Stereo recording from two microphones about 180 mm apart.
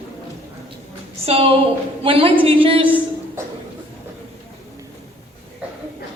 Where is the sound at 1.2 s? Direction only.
30° right (ahead or behind).